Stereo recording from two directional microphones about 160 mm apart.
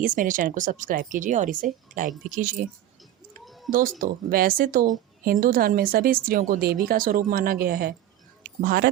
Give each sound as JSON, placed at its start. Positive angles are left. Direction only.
{"t": 0.0, "sound": "speech", "side_deg": -55}
{"t": 3.4, "sound": "a sound", "side_deg": 0}
{"t": 3.7, "sound": "speech", "side_deg": -60}